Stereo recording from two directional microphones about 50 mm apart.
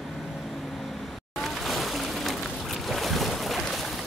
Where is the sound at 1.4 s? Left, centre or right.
Centre.